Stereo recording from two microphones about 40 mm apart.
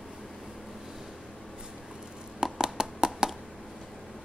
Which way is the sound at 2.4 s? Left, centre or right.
Centre.